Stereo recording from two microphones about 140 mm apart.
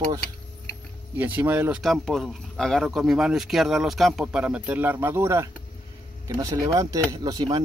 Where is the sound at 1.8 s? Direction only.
Centre (ahead or behind).